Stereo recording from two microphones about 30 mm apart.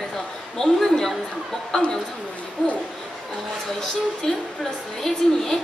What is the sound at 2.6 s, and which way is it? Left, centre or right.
Speech, left.